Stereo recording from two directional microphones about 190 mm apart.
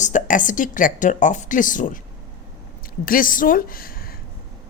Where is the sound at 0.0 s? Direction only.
40° left (ahead or behind).